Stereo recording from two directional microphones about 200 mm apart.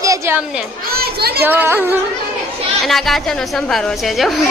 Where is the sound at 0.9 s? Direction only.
50° right (ahead or behind).